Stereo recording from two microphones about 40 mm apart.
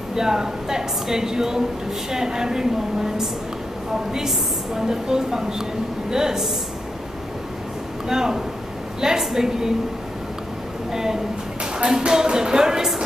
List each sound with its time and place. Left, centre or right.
0.1 s a woman's voice: centre
4.7 s a woman's voice: centre
8.1 s a woman's voice: centre
10.9 s a woman's voice: centre